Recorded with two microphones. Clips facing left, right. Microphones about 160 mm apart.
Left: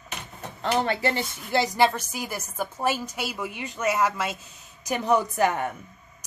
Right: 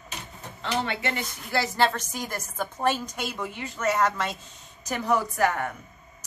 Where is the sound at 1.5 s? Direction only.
15° left (ahead or behind).